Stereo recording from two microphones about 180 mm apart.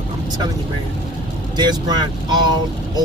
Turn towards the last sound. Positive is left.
turn(degrees=-25)  # may be behind; listen again after turning